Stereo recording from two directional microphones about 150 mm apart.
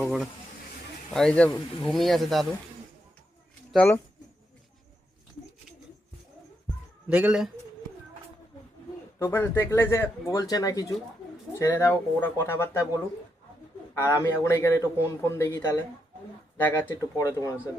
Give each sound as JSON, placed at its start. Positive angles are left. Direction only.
{"t": 0.0, "sound": "speech", "side_deg": 0}
{"t": 7.1, "sound": "a man's voice", "side_deg": -10}
{"t": 9.1, "sound": "a man's voice", "side_deg": 15}